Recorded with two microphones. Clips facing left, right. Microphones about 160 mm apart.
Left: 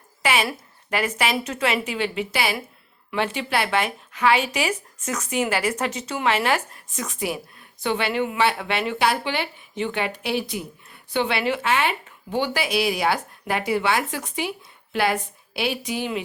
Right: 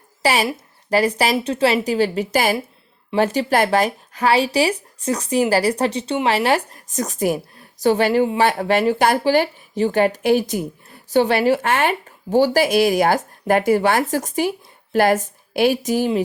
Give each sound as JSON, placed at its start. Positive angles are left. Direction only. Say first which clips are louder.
{"t": 0.2, "sound": "a woman's voice", "louder": "right 4 dB", "side_deg": -40}